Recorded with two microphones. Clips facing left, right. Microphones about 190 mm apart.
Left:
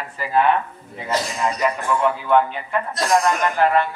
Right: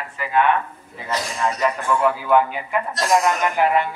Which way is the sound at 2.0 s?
5° right (ahead or behind).